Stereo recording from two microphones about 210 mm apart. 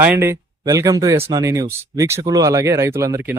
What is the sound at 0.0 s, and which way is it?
Speech, 10° right (ahead or behind).